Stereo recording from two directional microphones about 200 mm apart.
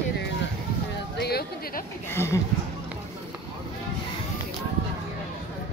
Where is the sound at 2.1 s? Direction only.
10° left (ahead or behind).